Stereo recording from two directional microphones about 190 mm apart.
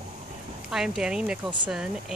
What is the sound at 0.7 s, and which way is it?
Speech, centre (ahead or behind).